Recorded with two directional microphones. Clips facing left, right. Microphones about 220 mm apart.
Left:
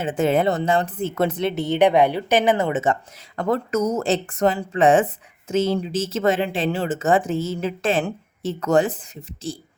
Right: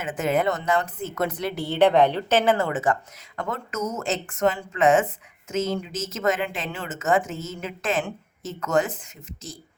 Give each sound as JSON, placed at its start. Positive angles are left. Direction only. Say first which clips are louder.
{"t": 0.0, "sound": "speech", "louder": "left 4 dB", "side_deg": 30}
{"t": 3.3, "sound": "speech", "louder": "left 8 dB", "side_deg": 35}